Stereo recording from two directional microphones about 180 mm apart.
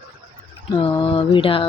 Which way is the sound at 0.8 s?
30° left (ahead or behind).